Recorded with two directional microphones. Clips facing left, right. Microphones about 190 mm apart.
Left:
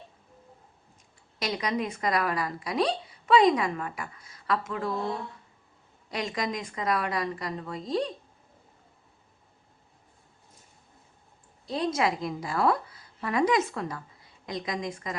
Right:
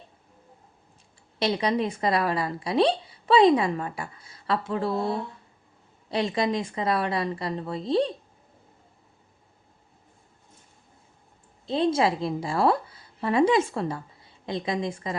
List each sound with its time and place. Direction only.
1.4 s a woman's voice: 30° right (ahead or behind)
6.1 s a woman's voice: 30° right (ahead or behind)
11.6 s a woman's voice: 25° right (ahead or behind)